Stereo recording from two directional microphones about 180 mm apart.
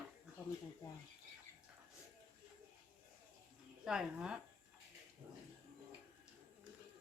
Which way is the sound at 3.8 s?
5° right (ahead or behind).